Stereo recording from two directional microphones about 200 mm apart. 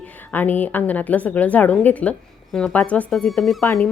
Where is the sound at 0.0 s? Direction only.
10° left (ahead or behind).